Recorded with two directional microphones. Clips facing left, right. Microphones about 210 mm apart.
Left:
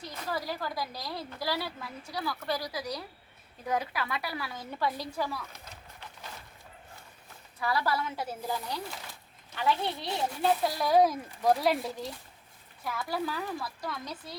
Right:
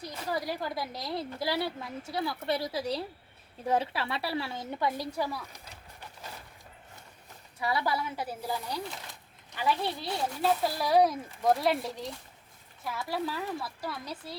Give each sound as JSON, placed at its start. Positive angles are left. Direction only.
{"t": 0.3, "sound": "a woman's voice", "side_deg": -20}
{"t": 7.6, "sound": "a child's voice", "side_deg": -15}